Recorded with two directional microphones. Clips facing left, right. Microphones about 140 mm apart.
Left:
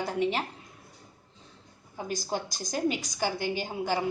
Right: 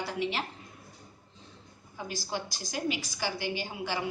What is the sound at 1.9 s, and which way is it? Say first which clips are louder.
A woman's voice: left 4 dB; 45° left (ahead or behind).